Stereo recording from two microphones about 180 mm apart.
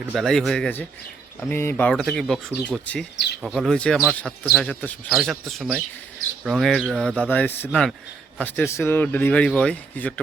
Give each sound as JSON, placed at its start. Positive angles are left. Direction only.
{"t": 0.2, "sound": "speech", "side_deg": 0}